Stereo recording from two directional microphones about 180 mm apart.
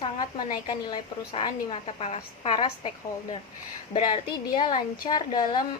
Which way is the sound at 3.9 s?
25° left (ahead or behind).